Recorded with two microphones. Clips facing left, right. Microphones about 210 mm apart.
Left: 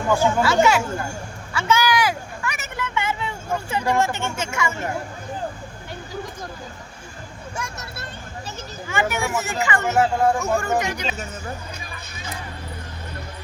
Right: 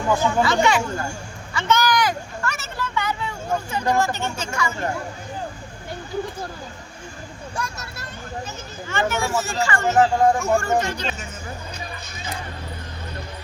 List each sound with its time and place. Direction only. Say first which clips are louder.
0.2 s speech: left 1 dB; 5° left (ahead or behind)
1.5 s a sound: even; 10° left (ahead or behind); by 4.7 s 25° left (ahead or behind)
8.9 s speech: right 1 dB; 15° left (ahead or behind)
10.0 s speech: right 2 dB; 5° left (ahead or behind)